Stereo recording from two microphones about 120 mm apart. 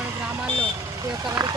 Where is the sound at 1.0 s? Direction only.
35° right (ahead or behind).